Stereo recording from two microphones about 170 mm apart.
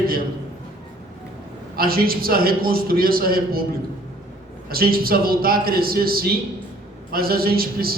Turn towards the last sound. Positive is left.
turn(degrees=-60)  # may be behind; listen again after turning